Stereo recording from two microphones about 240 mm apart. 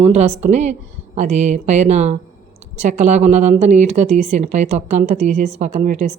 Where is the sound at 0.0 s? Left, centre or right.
Right.